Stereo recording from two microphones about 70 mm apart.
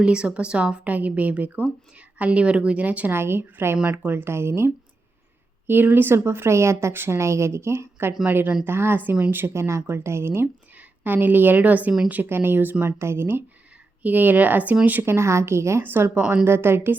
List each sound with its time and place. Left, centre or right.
0.0 s a woman's voice: centre
3.1 s speech: right
9.3 s speech: right
15.0 s speech: right
15.8 s speech: right